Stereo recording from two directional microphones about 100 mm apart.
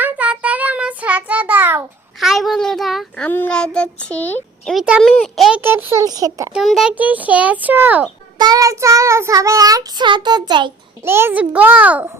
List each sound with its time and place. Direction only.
0.0 s child singing: 15° right (ahead or behind)
2.2 s a child's voice: centre (ahead or behind)
3.2 s child singing: 20° left (ahead or behind)
4.6 s a child's voice: centre (ahead or behind)
5.6 s a child's voice: 25° right (ahead or behind)
6.1 s child singing: 35° right (ahead or behind)
6.7 s a child's voice: 5° right (ahead or behind)
6.9 s a child's voice: 15° right (ahead or behind)
8.4 s child singing: 40° right (ahead or behind)
10.1 s a child's voice: 50° right (ahead or behind)
11.0 s a child's voice: 25° right (ahead or behind)